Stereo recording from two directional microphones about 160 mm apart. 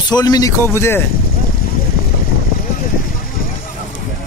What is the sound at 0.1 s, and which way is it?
Speech, 25° left (ahead or behind).